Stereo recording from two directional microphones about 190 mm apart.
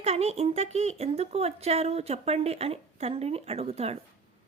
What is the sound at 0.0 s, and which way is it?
Speech, 35° right (ahead or behind).